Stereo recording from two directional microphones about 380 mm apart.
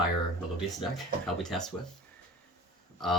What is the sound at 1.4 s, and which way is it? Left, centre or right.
Speech, centre.